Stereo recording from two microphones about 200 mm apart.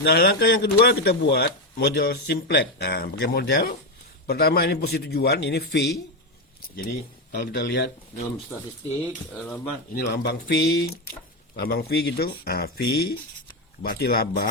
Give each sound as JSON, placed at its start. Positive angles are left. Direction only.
{"t": 0.0, "sound": "speech", "side_deg": 55}
{"t": 7.3, "sound": "speech", "side_deg": 55}
{"t": 9.9, "sound": "speech", "side_deg": 55}